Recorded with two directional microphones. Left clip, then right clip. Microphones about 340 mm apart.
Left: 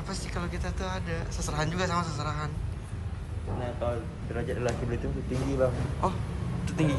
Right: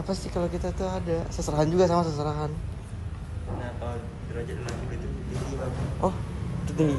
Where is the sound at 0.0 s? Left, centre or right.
Centre.